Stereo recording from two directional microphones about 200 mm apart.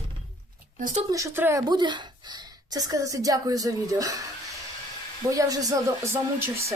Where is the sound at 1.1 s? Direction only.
15° right (ahead or behind).